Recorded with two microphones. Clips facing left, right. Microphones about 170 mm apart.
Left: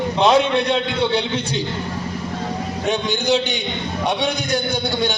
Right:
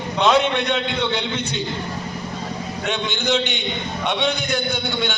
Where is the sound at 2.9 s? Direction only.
35° left (ahead or behind).